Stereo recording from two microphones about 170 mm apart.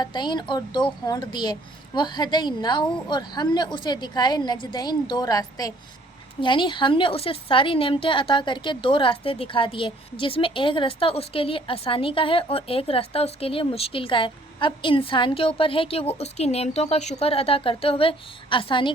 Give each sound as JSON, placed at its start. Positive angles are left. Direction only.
{"t": 0.0, "sound": "a woman's voice", "side_deg": 25}